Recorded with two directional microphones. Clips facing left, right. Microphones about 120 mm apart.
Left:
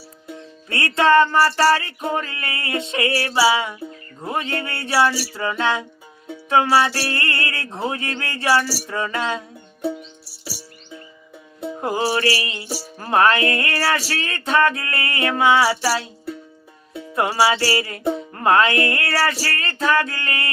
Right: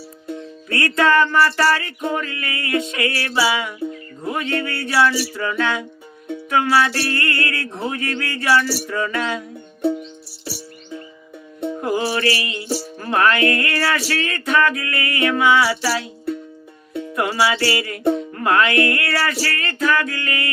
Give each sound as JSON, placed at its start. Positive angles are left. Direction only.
{"t": 0.7, "sound": "music", "side_deg": 25}
{"t": 11.8, "sound": "music", "side_deg": 30}
{"t": 17.2, "sound": "music", "side_deg": 35}